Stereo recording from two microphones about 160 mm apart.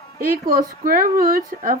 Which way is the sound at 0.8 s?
60° right (ahead or behind).